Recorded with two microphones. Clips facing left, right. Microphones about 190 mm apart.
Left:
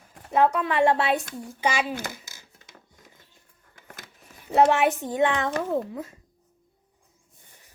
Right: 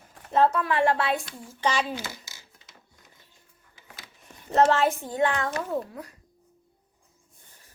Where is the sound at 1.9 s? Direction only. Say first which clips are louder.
Left 2 dB; 50° left (ahead or behind).